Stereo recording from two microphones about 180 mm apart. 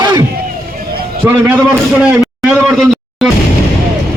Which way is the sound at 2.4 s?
Centre (ahead or behind).